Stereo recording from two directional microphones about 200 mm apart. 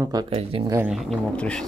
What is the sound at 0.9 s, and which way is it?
Speech, centre (ahead or behind).